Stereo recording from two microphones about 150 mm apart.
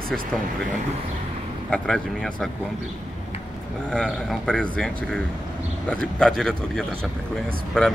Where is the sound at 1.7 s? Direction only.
5° left (ahead or behind).